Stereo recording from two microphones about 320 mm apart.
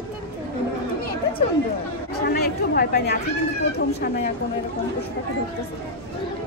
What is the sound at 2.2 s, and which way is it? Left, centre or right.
Speech, left.